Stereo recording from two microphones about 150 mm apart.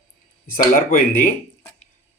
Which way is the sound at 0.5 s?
70° left (ahead or behind).